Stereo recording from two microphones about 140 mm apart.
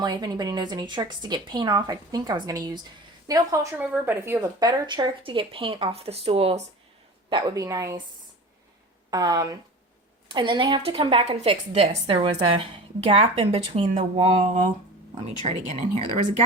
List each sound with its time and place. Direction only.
0.0 s speech: 30° right (ahead or behind)
3.8 s a woman's voice: 15° right (ahead or behind)
4.4 s a woman's voice: 30° right (ahead or behind)
7.3 s speech: 25° right (ahead or behind)
9.0 s a woman's voice: 25° right (ahead or behind); by 16.0 s 45° right (ahead or behind)